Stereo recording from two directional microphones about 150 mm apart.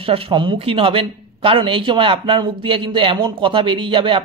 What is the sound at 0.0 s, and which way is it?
Speech, 35° right (ahead or behind).